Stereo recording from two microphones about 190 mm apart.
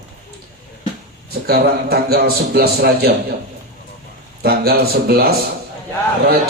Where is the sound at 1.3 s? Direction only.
55° right (ahead or behind).